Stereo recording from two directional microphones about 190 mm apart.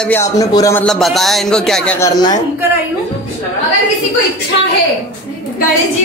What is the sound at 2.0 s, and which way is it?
Speech, 20° left (ahead or behind).